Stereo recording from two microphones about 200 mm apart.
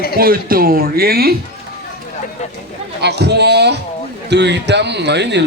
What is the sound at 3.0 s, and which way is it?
A man's voice, 55° right (ahead or behind).